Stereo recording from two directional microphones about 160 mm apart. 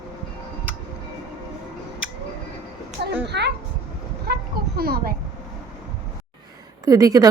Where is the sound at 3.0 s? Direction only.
90° right.